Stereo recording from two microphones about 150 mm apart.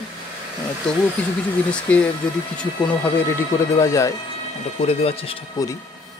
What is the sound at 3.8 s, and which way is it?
Speech, 20° left (ahead or behind).